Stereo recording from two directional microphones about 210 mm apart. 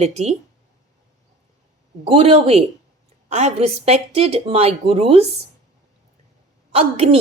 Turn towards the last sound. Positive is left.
turn(degrees=-30)  # may be behind; listen again after turning